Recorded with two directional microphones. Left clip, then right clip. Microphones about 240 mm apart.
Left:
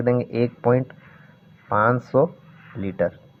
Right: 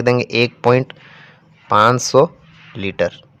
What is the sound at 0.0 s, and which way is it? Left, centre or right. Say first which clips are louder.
Speech: right 6 dB; right.